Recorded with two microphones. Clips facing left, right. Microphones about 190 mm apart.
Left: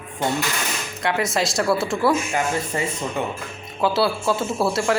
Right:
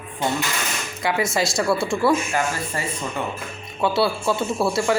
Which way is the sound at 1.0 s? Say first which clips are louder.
Even; centre (ahead or behind).